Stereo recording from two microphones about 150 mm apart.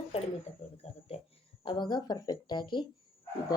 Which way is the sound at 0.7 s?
45° left (ahead or behind).